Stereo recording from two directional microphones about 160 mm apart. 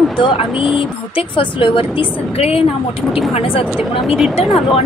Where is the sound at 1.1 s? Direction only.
35° left (ahead or behind).